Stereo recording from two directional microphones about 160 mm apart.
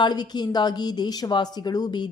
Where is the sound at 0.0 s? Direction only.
25° left (ahead or behind).